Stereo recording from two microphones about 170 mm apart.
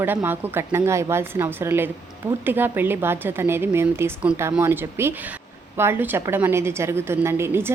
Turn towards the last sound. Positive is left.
turn(degrees=-15)  # may be behind; listen again after turning